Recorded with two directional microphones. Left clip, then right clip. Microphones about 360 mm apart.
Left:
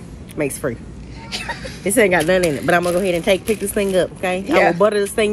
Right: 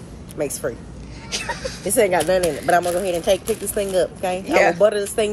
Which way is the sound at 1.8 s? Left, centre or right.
Centre.